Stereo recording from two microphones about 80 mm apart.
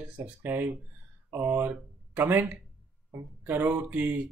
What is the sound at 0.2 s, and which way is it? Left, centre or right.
Speech, right.